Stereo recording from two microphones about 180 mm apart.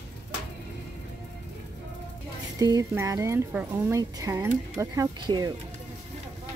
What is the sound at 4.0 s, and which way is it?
Speech, 20° right (ahead or behind).